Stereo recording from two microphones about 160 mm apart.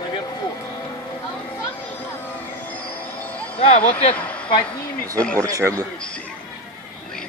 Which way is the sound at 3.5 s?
40° left (ahead or behind).